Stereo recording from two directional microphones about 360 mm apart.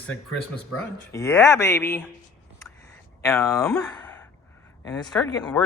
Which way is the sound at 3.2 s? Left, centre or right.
Centre.